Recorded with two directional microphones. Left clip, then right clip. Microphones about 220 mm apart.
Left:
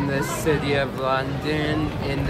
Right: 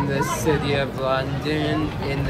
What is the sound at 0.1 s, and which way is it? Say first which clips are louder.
Speech: right 1 dB; 10° left (ahead or behind).